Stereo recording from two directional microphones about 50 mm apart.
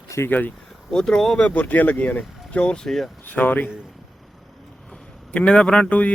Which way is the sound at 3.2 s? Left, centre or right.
Left.